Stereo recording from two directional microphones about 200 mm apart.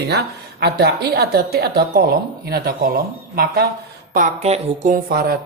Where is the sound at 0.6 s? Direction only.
55° right (ahead or behind).